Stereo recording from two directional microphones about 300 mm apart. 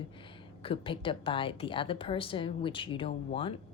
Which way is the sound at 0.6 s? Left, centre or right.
Centre.